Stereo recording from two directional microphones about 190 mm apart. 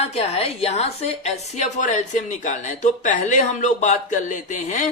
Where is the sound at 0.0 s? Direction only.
30° left (ahead or behind).